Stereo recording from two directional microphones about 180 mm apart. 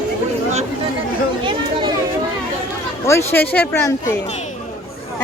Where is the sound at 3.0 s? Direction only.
15° left (ahead or behind).